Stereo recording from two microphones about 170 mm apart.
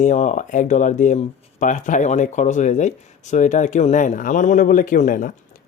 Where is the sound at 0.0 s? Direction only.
45° left (ahead or behind).